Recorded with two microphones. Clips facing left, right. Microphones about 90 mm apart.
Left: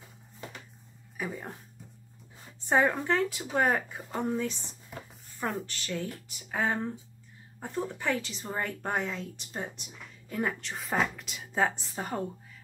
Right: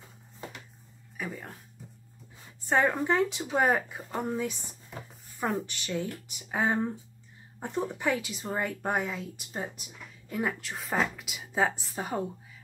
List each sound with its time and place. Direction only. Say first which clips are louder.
1.1 s speech: left 1 dB; centre (ahead or behind)
2.7 s a woman's voice: even; centre (ahead or behind)
3.1 s speech: right 2 dB; 15° right (ahead or behind)
3.5 s a woman's voice: right 1 dB; centre (ahead or behind)